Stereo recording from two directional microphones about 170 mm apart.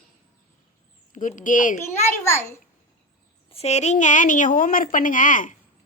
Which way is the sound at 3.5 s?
40° left (ahead or behind).